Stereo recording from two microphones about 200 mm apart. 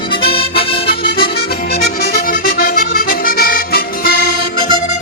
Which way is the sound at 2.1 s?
45° left (ahead or behind).